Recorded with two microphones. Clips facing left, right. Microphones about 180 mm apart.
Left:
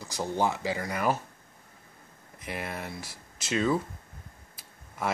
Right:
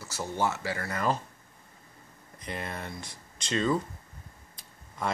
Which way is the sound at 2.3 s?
5° left (ahead or behind).